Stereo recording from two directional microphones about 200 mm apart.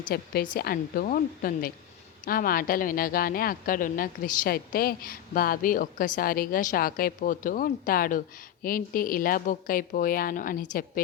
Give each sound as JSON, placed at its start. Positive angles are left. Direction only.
{"t": 0.1, "sound": "a woman's voice", "side_deg": 50}